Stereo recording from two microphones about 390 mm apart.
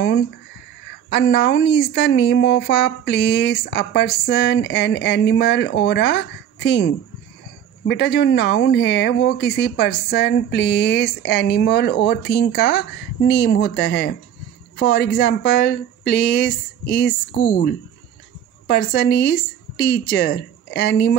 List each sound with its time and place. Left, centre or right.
1.1 s speech: left
18.7 s speech: left